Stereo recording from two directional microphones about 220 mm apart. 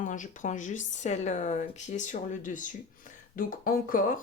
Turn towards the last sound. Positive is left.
turn(degrees=40)  # may be behind; listen again after turning